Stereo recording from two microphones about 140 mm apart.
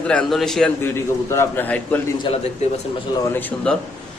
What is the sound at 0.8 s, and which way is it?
A man's voice, 20° left (ahead or behind).